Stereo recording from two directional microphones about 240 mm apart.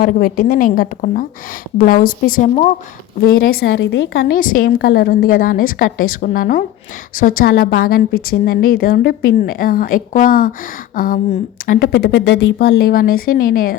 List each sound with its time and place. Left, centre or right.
0.0 s a woman's voice: left